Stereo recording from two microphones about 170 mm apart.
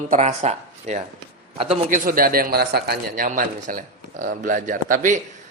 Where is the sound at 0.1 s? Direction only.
40° right (ahead or behind).